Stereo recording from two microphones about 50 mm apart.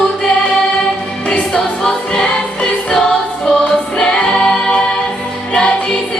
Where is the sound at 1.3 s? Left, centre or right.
Centre.